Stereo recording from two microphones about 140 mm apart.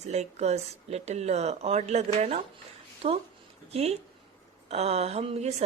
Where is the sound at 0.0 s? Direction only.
55° right (ahead or behind).